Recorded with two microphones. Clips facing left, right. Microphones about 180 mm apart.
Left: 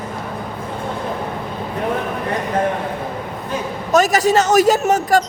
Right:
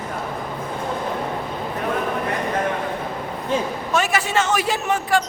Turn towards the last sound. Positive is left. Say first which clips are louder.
# left 5 dB
turn(degrees=40)  # may be behind; listen again after turning